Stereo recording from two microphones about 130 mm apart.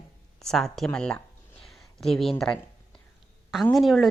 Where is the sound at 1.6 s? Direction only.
Centre (ahead or behind).